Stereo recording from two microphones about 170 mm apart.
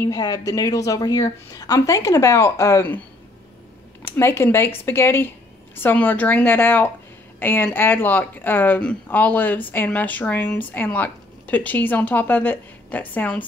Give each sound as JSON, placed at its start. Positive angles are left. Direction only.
{"t": 0.0, "sound": "a woman's voice", "side_deg": 20}
{"t": 4.0, "sound": "speech", "side_deg": 15}